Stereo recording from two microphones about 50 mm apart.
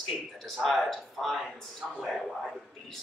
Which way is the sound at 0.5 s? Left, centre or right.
Centre.